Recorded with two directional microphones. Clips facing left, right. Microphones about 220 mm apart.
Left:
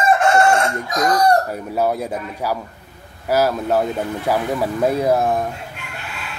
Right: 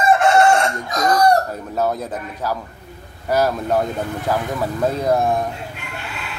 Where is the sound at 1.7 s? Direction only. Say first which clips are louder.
Left 2 dB; 10° left (ahead or behind).